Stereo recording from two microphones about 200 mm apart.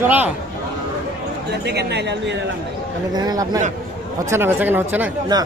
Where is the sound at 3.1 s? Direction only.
20° right (ahead or behind).